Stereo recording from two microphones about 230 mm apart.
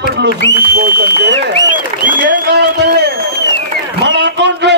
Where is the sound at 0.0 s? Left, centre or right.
Right.